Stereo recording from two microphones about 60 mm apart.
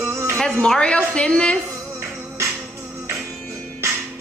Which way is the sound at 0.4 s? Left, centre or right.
Centre.